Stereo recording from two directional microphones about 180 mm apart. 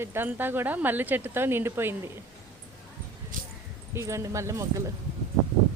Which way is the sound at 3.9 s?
15° right (ahead or behind).